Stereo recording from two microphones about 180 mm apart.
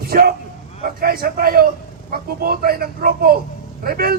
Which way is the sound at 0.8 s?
55° right (ahead or behind).